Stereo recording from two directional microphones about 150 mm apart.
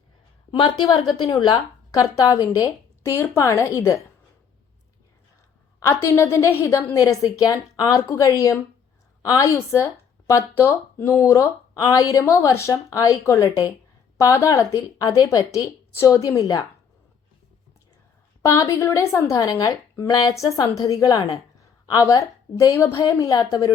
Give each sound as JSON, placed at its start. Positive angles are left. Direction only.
{"t": 0.6, "sound": "a woman's voice", "side_deg": 30}
{"t": 5.8, "sound": "a woman's voice", "side_deg": 15}
{"t": 18.4, "sound": "a woman's voice", "side_deg": 20}